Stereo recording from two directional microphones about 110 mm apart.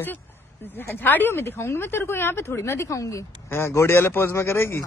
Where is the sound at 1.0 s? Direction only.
20° left (ahead or behind).